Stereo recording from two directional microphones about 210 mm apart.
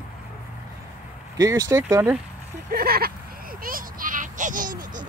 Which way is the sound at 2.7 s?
45° right (ahead or behind).